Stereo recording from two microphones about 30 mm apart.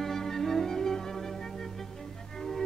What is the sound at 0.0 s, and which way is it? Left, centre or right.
Music, centre.